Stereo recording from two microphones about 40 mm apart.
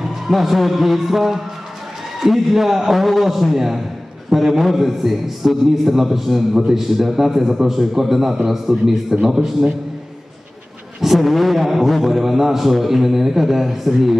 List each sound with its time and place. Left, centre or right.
0.1 s a man's voice: centre
11.0 s a man's voice: centre